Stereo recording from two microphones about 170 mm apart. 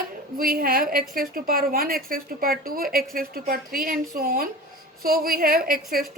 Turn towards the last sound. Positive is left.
turn(degrees=-55)  # may be behind; listen again after turning